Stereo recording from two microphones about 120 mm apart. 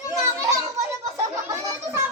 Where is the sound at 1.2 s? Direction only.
25° right (ahead or behind).